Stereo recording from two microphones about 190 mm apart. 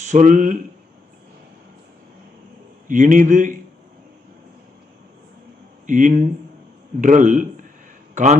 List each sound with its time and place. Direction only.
0.0 s speech: 40° right (ahead or behind)
2.8 s a man's voice: 45° right (ahead or behind)
5.8 s a man's voice: 40° right (ahead or behind)